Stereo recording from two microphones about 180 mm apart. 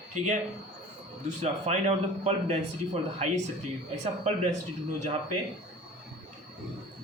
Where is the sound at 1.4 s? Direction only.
35° right (ahead or behind).